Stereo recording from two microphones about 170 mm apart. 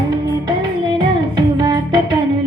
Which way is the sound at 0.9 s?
25° right (ahead or behind).